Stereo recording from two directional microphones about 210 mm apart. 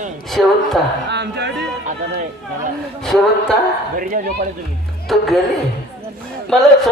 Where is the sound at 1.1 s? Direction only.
55° right (ahead or behind).